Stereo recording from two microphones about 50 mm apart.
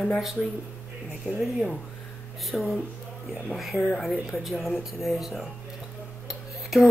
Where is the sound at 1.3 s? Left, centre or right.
Right.